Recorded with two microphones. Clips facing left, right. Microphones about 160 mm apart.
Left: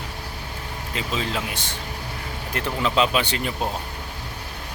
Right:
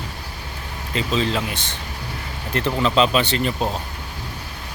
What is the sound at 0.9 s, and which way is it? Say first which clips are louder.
Speech: right 6 dB; 10° left (ahead or behind).